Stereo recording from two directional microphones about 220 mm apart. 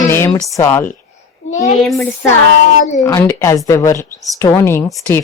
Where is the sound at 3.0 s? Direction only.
15° left (ahead or behind).